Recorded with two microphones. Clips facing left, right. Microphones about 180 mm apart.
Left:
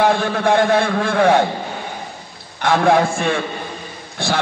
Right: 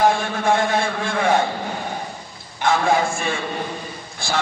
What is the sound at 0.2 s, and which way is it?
A man's voice, 60° left (ahead or behind).